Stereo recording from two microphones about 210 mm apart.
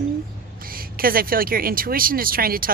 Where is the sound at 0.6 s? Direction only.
45° right (ahead or behind).